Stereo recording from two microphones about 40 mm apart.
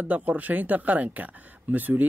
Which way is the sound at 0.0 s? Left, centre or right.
Right.